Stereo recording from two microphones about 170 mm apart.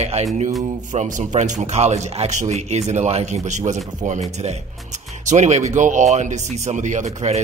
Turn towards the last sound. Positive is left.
turn(degrees=-40)  # may be behind; listen again after turning